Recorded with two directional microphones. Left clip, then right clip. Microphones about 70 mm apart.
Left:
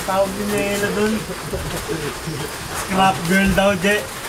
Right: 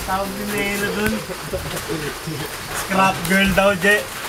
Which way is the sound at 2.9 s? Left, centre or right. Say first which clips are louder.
Even; right.